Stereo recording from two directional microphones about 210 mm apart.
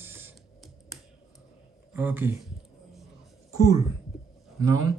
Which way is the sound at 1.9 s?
10° right (ahead or behind).